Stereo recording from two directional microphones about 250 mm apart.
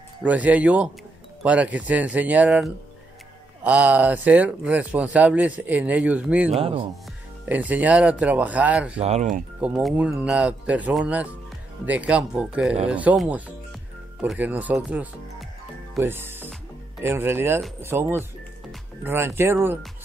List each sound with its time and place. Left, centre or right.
0.2 s speech: centre
6.5 s speech: right
7.4 s speech: centre
8.9 s speech: right
9.6 s speech: centre